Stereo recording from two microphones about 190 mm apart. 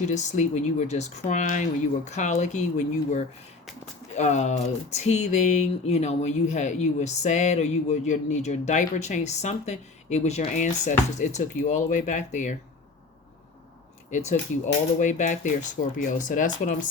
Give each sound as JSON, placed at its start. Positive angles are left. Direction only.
{"t": 0.1, "sound": "speech", "side_deg": 40}
{"t": 14.1, "sound": "speech", "side_deg": 40}